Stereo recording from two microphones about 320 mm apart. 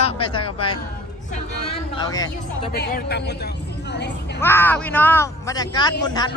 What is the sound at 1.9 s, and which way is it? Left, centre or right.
Speech, centre.